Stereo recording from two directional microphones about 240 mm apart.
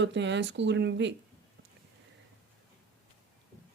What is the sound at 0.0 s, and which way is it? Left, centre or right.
Speech, right.